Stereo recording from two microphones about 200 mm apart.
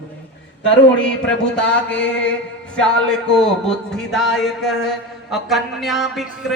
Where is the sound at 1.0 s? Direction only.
5° left (ahead or behind).